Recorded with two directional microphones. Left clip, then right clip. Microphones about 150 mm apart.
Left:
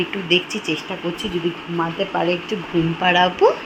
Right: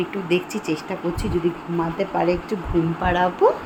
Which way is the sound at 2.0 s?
10° right (ahead or behind).